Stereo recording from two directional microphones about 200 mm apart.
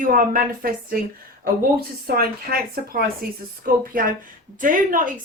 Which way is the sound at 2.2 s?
50° right (ahead or behind).